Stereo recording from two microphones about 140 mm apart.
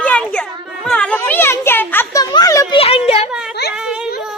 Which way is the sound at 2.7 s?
45° left (ahead or behind).